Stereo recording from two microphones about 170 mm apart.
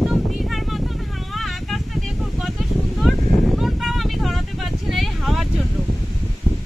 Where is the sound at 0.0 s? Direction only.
Centre (ahead or behind).